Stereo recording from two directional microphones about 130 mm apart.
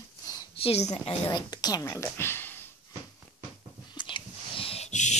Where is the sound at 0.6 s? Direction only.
50° left (ahead or behind); by 2.6 s 15° left (ahead or behind).